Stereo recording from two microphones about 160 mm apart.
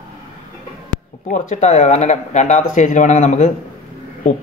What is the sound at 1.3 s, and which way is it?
Speech, 50° left (ahead or behind).